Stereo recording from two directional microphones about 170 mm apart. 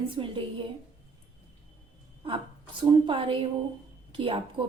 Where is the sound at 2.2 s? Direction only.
30° right (ahead or behind).